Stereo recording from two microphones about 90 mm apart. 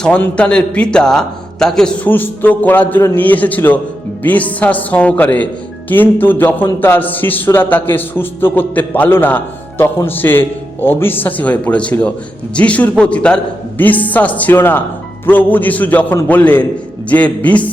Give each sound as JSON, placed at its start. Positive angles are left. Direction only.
{"t": 0.2, "sound": "a man's voice", "side_deg": 10}
{"t": 2.0, "sound": "a man's voice", "side_deg": 20}